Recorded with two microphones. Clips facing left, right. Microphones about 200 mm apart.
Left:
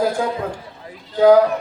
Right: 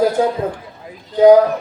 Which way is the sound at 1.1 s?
20° right (ahead or behind).